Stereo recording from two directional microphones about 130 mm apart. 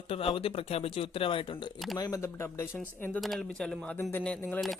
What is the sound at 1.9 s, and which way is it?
Speech, 30° left (ahead or behind).